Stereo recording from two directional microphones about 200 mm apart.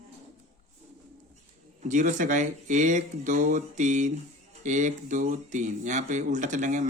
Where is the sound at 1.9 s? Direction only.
40° right (ahead or behind).